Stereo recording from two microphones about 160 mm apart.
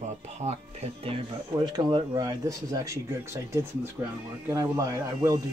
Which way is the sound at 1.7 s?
25° right (ahead or behind).